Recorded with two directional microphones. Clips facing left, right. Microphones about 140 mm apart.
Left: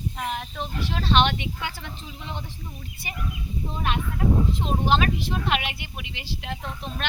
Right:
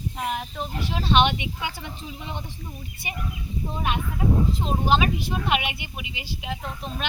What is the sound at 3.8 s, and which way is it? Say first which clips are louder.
Speech: even; 5° right (ahead or behind).